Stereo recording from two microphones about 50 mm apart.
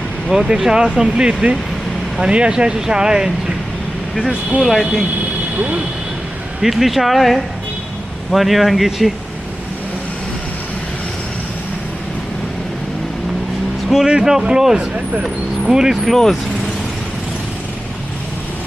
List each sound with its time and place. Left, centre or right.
0.3 s speech: centre
4.6 s speech: centre
5.5 s speech: right
6.6 s speech: centre
13.9 s speech: centre
14.8 s speech: right
15.2 s speech: centre